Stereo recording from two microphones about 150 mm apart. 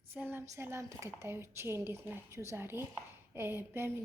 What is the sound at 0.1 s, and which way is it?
Speech, 15° right (ahead or behind).